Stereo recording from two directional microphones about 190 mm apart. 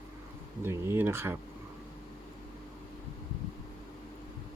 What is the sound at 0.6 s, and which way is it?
Speech, 10° right (ahead or behind).